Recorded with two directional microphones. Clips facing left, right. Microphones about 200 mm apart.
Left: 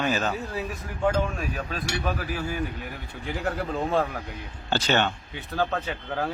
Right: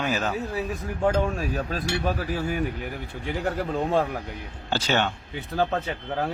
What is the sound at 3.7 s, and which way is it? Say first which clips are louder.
A man's voice: right 2 dB; 5° right (ahead or behind).